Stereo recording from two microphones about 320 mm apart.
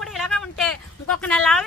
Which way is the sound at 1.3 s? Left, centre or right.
Centre.